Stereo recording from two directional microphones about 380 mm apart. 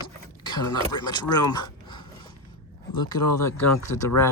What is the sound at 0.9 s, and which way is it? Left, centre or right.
Speech, centre.